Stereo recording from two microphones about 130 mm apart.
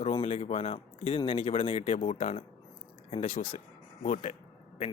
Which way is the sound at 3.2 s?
90° left.